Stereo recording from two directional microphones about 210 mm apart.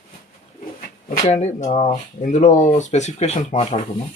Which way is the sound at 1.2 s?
30° left (ahead or behind).